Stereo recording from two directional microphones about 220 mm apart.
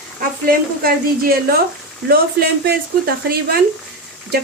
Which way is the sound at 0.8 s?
45° right (ahead or behind).